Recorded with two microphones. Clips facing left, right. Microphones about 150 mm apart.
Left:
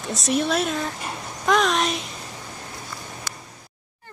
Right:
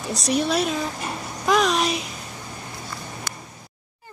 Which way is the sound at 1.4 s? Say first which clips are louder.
Even; centre (ahead or behind).